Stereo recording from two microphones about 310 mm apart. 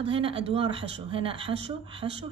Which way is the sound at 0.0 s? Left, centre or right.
Centre.